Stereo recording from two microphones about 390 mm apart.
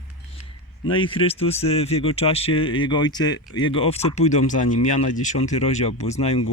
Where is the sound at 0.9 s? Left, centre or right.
Centre.